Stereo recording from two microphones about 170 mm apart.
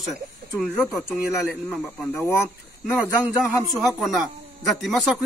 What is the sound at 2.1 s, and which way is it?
Speech, 15° left (ahead or behind).